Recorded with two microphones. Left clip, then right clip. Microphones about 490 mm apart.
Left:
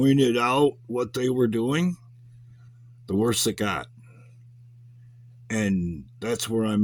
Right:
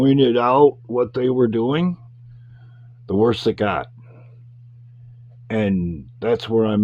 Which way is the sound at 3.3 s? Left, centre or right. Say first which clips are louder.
Right 6 dB; left.